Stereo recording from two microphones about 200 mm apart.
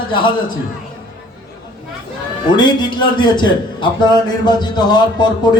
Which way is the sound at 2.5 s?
20° left (ahead or behind).